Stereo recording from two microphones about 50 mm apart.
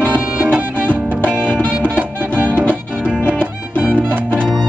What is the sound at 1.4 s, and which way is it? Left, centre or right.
Music, left.